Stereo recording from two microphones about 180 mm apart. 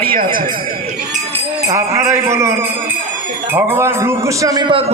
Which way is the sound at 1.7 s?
15° right (ahead or behind).